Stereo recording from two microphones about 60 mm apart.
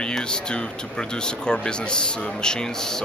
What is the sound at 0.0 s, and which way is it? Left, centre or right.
Speech, centre.